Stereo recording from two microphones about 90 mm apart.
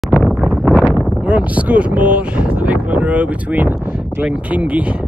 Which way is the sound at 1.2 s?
15° right (ahead or behind).